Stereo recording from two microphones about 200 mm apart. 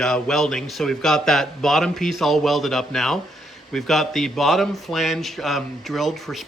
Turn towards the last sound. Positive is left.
turn(degrees=0)  # may be behind; listen again after turning